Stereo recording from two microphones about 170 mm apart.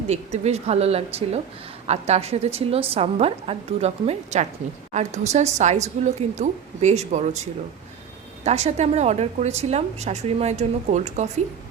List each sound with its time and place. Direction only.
0.1 s a woman's voice: 40° right (ahead or behind)
8.4 s a woman's voice: 40° right (ahead or behind)